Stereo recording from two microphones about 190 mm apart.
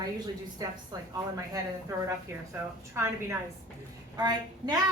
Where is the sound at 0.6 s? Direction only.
20° right (ahead or behind).